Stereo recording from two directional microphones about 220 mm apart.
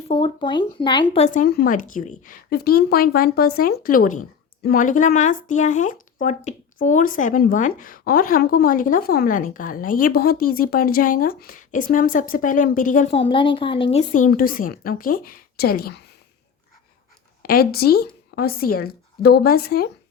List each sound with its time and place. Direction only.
0.1 s speech: 20° left (ahead or behind)
1.1 s speech: 30° left (ahead or behind)
17.4 s a woman's voice: 45° left (ahead or behind)